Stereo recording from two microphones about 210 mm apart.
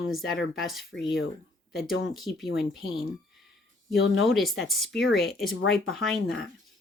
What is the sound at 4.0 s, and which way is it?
Speech, 65° left (ahead or behind).